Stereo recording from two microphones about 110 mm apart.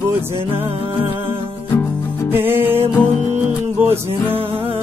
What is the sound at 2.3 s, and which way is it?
Music, 20° right (ahead or behind).